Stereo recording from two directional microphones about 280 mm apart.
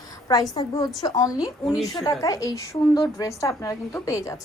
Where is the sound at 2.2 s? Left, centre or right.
Centre.